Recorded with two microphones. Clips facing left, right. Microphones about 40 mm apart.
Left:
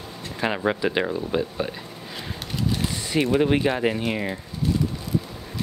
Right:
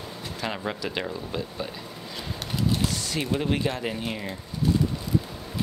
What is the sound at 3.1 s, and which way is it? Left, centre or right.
Speech, left.